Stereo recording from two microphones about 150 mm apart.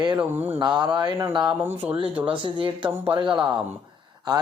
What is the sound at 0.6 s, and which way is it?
Speech, 30° right (ahead or behind).